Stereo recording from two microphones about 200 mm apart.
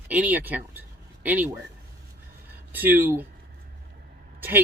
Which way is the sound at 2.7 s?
10° right (ahead or behind).